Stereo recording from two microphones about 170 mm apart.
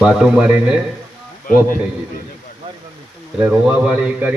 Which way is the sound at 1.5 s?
55° left (ahead or behind).